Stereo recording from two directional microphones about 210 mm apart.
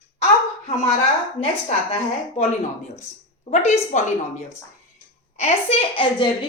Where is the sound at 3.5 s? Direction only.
35° left (ahead or behind).